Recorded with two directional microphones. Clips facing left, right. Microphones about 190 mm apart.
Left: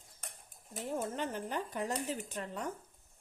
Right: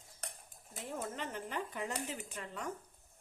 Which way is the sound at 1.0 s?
35° left (ahead or behind).